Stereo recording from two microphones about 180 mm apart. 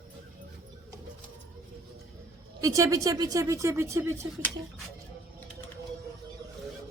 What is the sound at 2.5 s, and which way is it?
Speech, 20° right (ahead or behind).